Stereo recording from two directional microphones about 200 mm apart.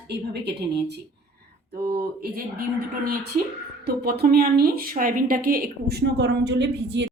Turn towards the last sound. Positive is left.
turn(degrees=-60)  # may be behind; listen again after turning